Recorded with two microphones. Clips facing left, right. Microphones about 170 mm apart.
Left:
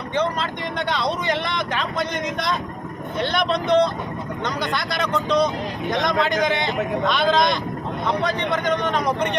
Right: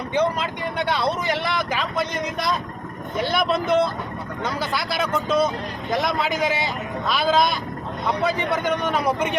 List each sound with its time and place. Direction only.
0.1 s a man's voice: 10° right (ahead or behind)